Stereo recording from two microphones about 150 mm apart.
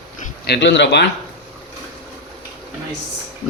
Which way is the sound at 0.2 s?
90° left.